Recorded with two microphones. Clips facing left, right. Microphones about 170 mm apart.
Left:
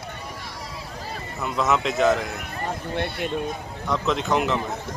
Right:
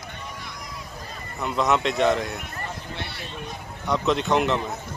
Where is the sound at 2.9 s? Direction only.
55° left (ahead or behind).